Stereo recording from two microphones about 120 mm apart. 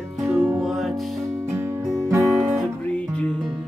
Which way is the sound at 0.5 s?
Centre (ahead or behind).